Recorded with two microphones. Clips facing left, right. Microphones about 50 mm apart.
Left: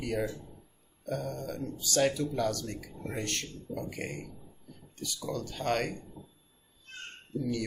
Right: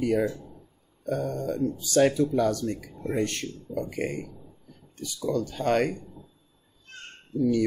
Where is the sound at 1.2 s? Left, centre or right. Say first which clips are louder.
Right 9 dB; right.